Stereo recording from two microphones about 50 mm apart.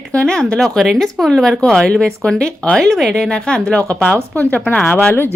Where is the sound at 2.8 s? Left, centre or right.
Centre; by 4.7 s left.